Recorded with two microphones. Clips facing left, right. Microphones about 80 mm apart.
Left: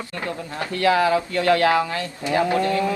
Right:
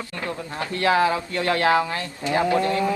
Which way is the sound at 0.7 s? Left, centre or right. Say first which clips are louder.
Left 2 dB; right.